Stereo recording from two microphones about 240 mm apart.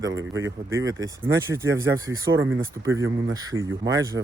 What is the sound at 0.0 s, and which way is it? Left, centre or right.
Speech, centre.